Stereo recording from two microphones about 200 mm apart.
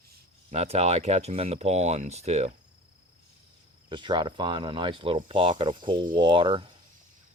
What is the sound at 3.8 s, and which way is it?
Speech, 25° right (ahead or behind).